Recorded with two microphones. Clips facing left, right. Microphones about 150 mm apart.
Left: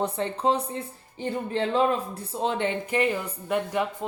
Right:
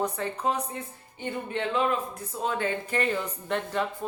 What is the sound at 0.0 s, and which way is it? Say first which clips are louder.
Speech: left 3 dB; 30° left (ahead or behind).